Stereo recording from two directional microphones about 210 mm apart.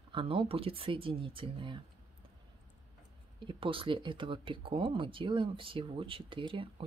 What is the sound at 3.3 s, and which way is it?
Speech, 25° right (ahead or behind).